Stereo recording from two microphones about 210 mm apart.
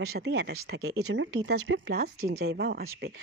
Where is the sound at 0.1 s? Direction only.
50° right (ahead or behind).